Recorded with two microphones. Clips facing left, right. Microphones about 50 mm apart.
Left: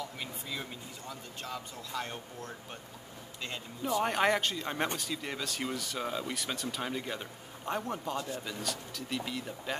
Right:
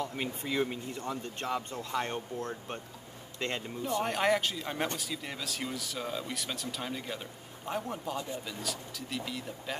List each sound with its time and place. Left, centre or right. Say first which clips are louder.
0.2 s speech: right 8 dB; right
3.3 s speech: right 6 dB; right
4.0 s a man's voice: even; centre